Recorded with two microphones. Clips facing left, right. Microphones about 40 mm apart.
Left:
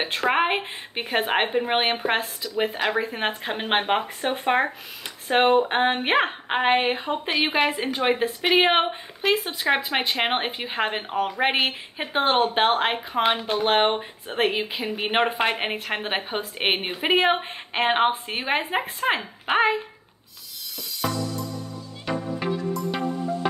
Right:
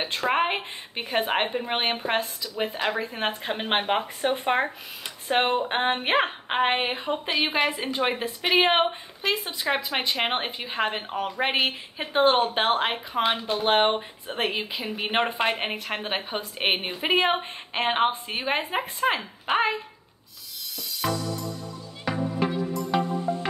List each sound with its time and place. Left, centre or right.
0.0 s a woman's voice: centre
22.0 s music: centre